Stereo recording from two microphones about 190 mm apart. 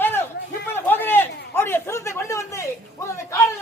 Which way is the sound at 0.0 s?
10° left (ahead or behind).